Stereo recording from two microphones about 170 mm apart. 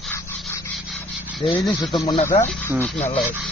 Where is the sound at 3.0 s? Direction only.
40° left (ahead or behind).